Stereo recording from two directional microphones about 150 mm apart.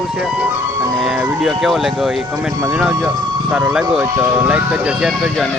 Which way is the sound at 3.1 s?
30° right (ahead or behind).